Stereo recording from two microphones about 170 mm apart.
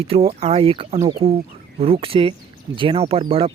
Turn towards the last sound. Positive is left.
turn(degrees=-30)  # may be behind; listen again after turning